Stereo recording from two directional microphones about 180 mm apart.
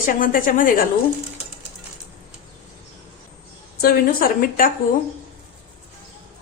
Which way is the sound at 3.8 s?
55° left (ahead or behind).